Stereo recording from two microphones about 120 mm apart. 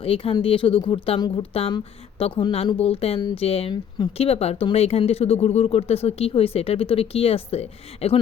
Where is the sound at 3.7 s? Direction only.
40° left (ahead or behind).